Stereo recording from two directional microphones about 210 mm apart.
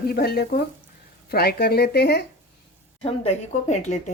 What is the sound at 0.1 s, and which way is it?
Speech, 45° left (ahead or behind).